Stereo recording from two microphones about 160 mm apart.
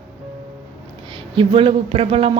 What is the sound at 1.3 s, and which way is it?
Speech, 30° right (ahead or behind).